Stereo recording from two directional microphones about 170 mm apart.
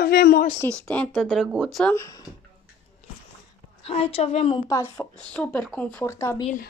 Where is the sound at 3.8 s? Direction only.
35° left (ahead or behind).